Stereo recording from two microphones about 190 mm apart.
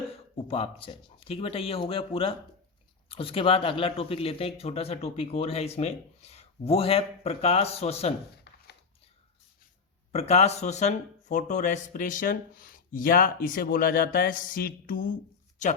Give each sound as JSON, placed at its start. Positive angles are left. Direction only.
{"t": 0.3, "sound": "speech", "side_deg": 30}
{"t": 8.5, "sound": "a sound", "side_deg": 60}
{"t": 10.1, "sound": "speech", "side_deg": 35}